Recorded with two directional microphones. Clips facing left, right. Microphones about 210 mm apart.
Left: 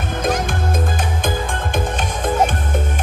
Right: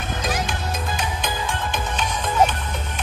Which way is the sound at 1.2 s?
50° left (ahead or behind).